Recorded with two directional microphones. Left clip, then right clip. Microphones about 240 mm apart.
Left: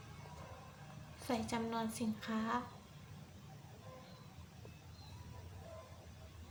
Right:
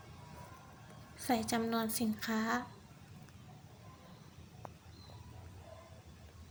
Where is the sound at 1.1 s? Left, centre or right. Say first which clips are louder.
Right 5 dB; centre.